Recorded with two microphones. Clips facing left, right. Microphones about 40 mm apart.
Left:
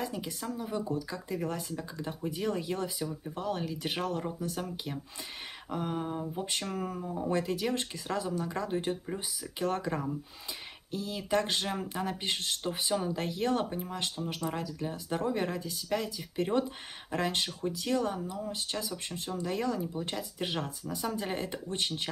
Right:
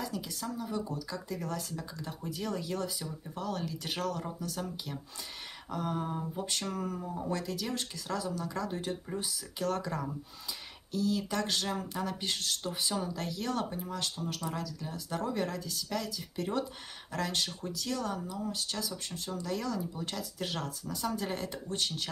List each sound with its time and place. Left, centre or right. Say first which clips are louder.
0.0 s speech: left 1 dB; left; by 7.2 s centre
7.2 s speech: left 6 dB; left